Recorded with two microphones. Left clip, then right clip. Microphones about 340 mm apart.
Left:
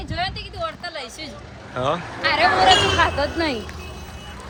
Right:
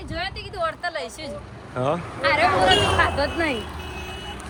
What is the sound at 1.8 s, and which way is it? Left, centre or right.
Speech, centre.